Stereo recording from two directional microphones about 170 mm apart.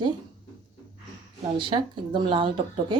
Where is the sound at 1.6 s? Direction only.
30° right (ahead or behind).